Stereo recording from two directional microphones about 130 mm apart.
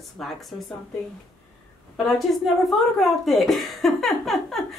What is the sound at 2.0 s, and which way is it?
A man's voice, centre (ahead or behind).